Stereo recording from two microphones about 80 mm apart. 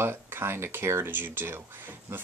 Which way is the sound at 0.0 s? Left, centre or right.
Right.